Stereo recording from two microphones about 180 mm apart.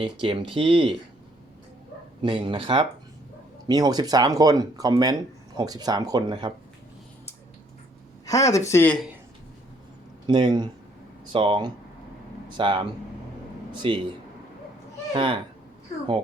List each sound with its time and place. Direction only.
0.0 s speech: 30° right (ahead or behind)
2.2 s speech: 25° right (ahead or behind)
8.3 s speech: 20° left (ahead or behind)
10.2 s speech: 25° right (ahead or behind)
15.1 s speech: 30° right (ahead or behind)